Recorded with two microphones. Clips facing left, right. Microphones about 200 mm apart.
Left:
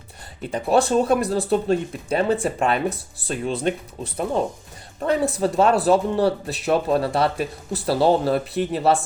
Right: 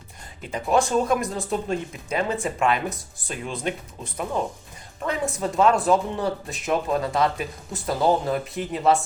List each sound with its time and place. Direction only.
0.5 s speech: 35° left (ahead or behind)